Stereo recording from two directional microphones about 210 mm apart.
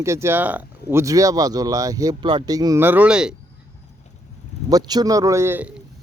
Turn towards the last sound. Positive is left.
turn(degrees=-5)  # may be behind; listen again after turning